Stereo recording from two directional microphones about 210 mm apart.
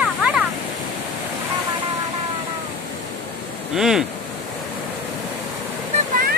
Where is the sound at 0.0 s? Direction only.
5° right (ahead or behind).